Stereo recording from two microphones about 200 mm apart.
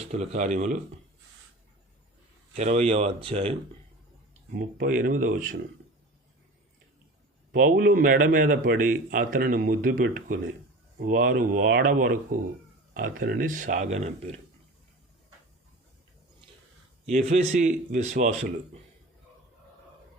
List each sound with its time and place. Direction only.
0.0 s speech: 30° right (ahead or behind)
2.6 s speech: 35° right (ahead or behind)
4.5 s speech: 45° right (ahead or behind)
7.5 s speech: 45° right (ahead or behind)
17.1 s speech: 35° right (ahead or behind)